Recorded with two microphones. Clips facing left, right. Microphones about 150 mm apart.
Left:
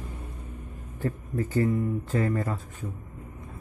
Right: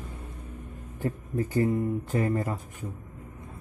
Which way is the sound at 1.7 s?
20° right (ahead or behind).